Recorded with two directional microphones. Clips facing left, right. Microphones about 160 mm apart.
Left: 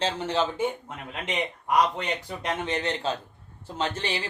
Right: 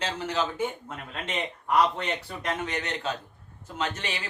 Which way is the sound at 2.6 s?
30° left (ahead or behind).